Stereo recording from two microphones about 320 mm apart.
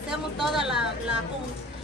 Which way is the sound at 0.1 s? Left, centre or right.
Centre.